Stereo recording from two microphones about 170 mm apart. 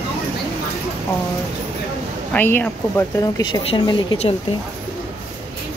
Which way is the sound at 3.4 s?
25° left (ahead or behind).